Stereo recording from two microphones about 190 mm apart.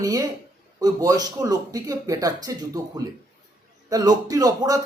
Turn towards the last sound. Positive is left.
turn(degrees=-20)  # may be behind; listen again after turning